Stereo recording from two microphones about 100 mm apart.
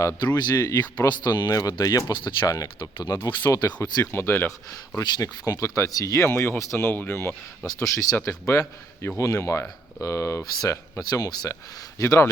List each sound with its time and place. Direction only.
0.2 s speech: 45° left (ahead or behind)
2.5 s a man's voice: 35° left (ahead or behind)
3.2 s speech: 50° left (ahead or behind)
3.5 s a man's voice: 35° left (ahead or behind)
4.9 s a man's voice: 40° left (ahead or behind)
6.2 s a man's voice: 25° left (ahead or behind); by 11.5 s 40° left (ahead or behind)
11.9 s a man's voice: 30° left (ahead or behind)